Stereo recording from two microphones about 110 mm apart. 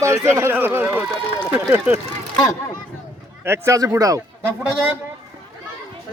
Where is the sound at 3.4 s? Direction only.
25° right (ahead or behind).